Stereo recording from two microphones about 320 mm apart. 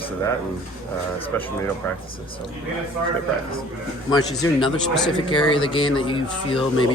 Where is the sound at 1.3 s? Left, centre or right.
Centre.